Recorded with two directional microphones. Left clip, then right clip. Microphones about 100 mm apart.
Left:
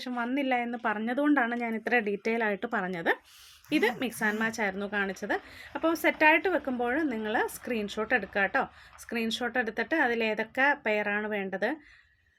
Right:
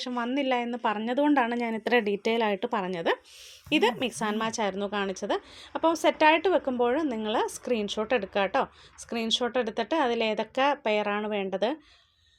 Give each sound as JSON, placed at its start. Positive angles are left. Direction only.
{"t": 0.2, "sound": "a woman's voice", "side_deg": -20}
{"t": 1.7, "sound": "speech", "side_deg": -35}
{"t": 2.2, "sound": "speech", "side_deg": -20}
{"t": 2.6, "sound": "a woman's voice", "side_deg": -10}
{"t": 4.2, "sound": "a woman's voice", "side_deg": -15}